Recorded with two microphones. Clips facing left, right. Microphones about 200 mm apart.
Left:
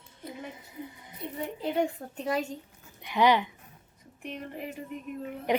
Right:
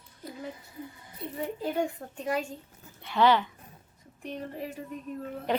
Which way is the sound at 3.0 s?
15° left (ahead or behind).